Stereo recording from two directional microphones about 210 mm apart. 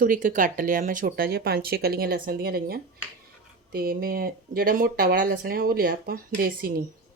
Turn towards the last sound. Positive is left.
turn(degrees=-45)  # may be behind; listen again after turning